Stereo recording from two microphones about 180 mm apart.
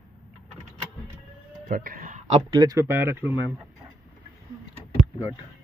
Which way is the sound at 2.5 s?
20° right (ahead or behind).